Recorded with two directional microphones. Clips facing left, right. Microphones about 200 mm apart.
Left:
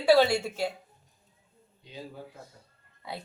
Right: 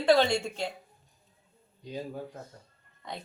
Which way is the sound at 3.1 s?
10° left (ahead or behind).